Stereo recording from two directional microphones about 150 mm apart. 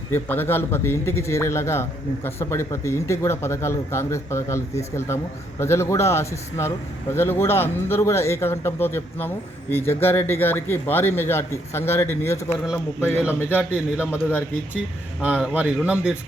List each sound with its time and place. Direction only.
0.1 s a man's voice: 15° left (ahead or behind)
13.1 s a man's voice: 10° right (ahead or behind)
14.0 s a man's voice: 15° left (ahead or behind)
15.2 s a man's voice: 10° right (ahead or behind)